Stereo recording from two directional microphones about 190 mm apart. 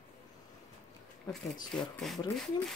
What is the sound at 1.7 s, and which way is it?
Speech, centre (ahead or behind).